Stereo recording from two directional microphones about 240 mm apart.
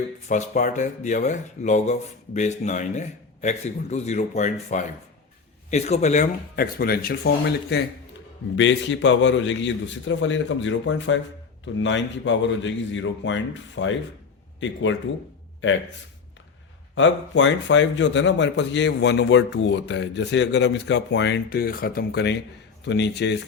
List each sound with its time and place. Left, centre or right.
0.3 s speech: left
16.9 s speech: left